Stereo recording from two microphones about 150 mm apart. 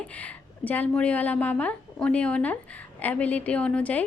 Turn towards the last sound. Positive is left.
turn(degrees=10)  # may be behind; listen again after turning